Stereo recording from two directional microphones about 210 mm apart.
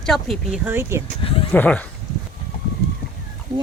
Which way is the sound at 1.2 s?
25° left (ahead or behind).